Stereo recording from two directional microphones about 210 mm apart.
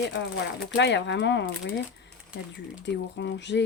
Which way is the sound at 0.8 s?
55° left (ahead or behind).